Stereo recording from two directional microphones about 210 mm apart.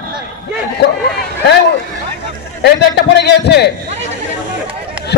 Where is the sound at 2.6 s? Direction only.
50° left (ahead or behind).